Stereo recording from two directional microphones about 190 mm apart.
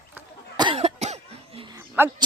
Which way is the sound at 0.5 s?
20° right (ahead or behind).